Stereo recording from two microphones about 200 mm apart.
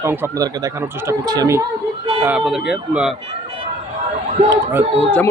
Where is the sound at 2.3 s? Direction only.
5° right (ahead or behind).